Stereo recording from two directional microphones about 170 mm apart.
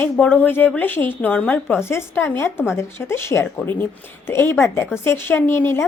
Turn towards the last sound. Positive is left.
turn(degrees=15)  # may be behind; listen again after turning